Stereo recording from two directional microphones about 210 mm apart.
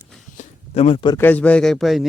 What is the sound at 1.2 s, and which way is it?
Speech, 10° left (ahead or behind).